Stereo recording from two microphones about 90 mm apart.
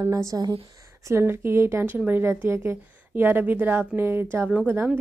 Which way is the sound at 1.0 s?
30° right (ahead or behind).